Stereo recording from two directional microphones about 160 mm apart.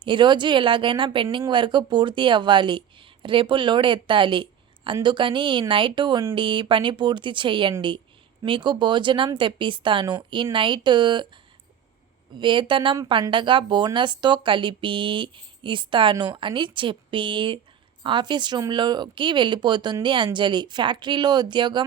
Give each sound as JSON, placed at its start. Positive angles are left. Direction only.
{"t": 0.0, "sound": "speech", "side_deg": -30}
{"t": 12.4, "sound": "speech", "side_deg": -30}